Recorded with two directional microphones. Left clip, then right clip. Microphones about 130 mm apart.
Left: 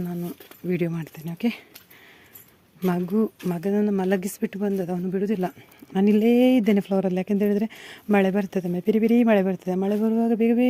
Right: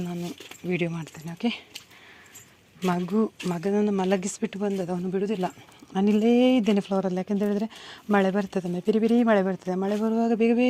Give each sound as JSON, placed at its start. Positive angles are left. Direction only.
{"t": 0.0, "sound": "a sound", "side_deg": 30}
{"t": 0.7, "sound": "speech", "side_deg": 50}
{"t": 2.8, "sound": "speech", "side_deg": 35}